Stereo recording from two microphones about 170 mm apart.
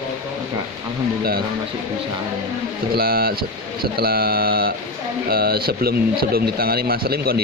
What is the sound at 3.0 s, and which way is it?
Speech, 60° right (ahead or behind).